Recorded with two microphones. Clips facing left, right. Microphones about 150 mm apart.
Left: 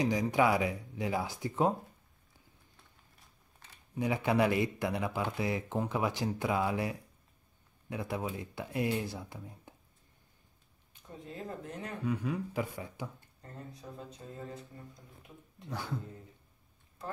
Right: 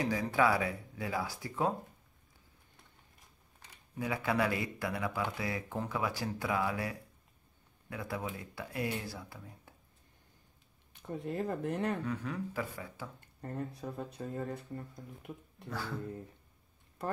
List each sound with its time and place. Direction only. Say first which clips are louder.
0.0 s speech: left 2 dB; 15° left (ahead or behind)
4.0 s speech: left 3 dB; 20° left (ahead or behind)
10.9 s speech: right 8 dB; 65° right (ahead or behind)
12.0 s speech: left 3 dB; 10° left (ahead or behind)
13.4 s speech: right 9 dB; 60° right (ahead or behind)